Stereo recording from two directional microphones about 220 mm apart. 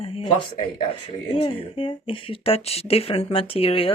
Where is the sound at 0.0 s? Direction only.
25° left (ahead or behind).